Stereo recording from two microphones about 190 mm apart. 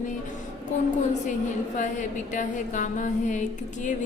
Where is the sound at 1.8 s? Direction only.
40° left (ahead or behind).